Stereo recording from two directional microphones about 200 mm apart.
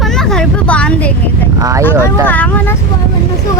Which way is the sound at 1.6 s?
15° right (ahead or behind).